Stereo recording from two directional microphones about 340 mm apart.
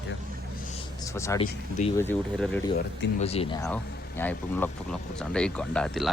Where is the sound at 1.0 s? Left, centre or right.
Centre.